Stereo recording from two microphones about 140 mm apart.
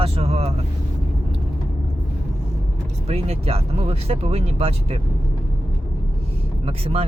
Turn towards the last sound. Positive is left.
turn(degrees=-45)  # may be behind; listen again after turning